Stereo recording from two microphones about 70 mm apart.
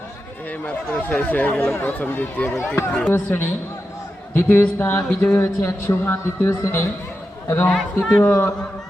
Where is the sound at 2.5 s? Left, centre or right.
Left.